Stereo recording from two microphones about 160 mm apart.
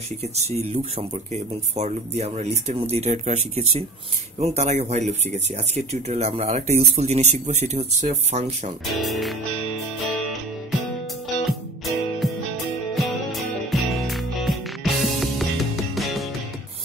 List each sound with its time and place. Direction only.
0.2 s speech: 40° right (ahead or behind)
8.8 s speech: centre (ahead or behind)
11.4 s music: centre (ahead or behind)